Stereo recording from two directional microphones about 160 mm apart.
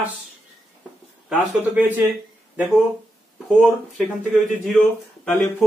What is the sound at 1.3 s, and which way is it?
Speech, 10° right (ahead or behind).